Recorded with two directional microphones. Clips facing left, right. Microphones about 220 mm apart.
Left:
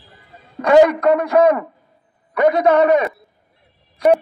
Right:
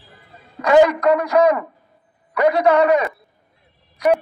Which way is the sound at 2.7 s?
50° left (ahead or behind).